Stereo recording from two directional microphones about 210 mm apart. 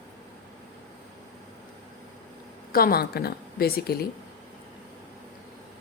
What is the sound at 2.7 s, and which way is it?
A woman's voice, 45° left (ahead or behind).